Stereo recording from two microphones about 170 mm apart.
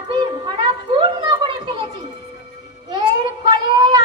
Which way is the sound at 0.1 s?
25° right (ahead or behind).